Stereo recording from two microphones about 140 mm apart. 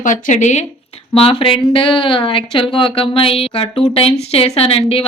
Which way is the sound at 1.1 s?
40° left (ahead or behind).